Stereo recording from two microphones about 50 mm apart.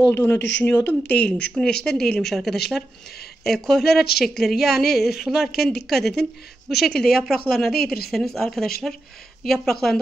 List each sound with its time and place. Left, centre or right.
0.1 s speech: left
1.1 s a woman's voice: left; by 9.9 s centre